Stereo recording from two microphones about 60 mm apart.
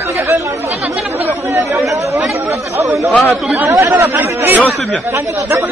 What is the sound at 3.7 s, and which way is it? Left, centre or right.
Speech, right.